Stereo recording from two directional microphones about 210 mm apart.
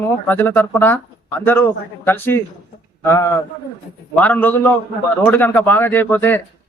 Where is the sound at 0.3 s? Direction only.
10° left (ahead or behind).